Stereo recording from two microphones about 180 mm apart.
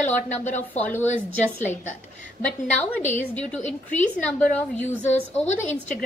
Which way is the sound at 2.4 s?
10° left (ahead or behind).